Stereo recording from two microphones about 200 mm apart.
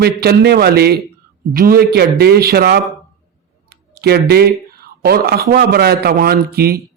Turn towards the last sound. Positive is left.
turn(degrees=-50)  # may be behind; listen again after turning